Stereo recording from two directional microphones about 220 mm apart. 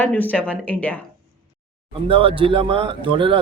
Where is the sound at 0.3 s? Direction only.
5° left (ahead or behind).